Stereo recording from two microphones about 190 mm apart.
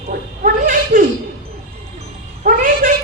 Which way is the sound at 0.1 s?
45° right (ahead or behind).